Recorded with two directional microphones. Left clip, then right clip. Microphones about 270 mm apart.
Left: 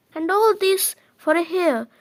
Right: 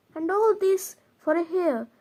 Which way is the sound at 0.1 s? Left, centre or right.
Left.